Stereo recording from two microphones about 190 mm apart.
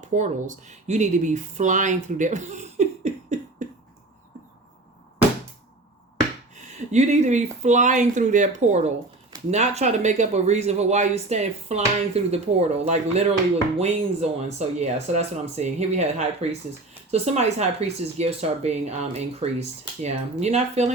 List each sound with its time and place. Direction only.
0.2 s speech: 40° right (ahead or behind)
6.9 s speech: 40° right (ahead or behind)